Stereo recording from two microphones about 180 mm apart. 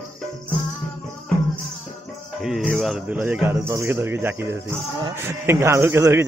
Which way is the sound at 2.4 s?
5° right (ahead or behind).